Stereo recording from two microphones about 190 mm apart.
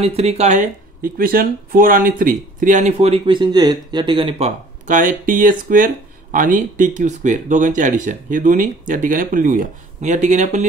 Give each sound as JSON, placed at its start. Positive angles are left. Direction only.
{"t": 0.0, "sound": "speech", "side_deg": -30}